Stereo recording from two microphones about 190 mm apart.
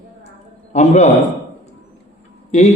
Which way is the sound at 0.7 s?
35° left (ahead or behind).